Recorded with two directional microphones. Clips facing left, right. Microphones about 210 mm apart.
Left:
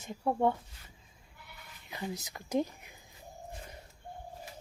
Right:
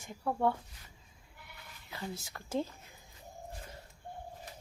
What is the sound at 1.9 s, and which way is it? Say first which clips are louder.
Speech: left 3 dB; 20° left (ahead or behind).